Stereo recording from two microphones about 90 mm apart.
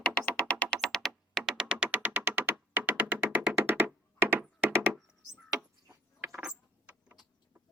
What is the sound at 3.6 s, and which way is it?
Thunk, 25° right (ahead or behind).